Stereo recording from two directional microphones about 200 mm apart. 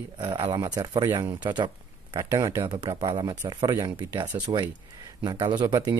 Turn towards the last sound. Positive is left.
turn(degrees=-20)  # may be behind; listen again after turning